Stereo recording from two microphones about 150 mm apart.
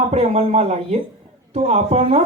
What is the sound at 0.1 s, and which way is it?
Speech, 40° right (ahead or behind).